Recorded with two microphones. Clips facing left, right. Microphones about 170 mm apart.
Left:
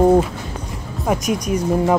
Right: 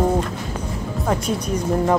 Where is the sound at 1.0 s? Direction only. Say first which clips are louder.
Left 3 dB; 10° left (ahead or behind).